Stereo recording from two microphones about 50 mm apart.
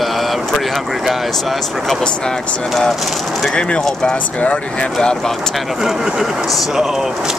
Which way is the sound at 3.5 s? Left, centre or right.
Centre.